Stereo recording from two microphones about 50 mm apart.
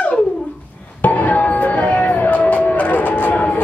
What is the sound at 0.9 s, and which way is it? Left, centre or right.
Music, left.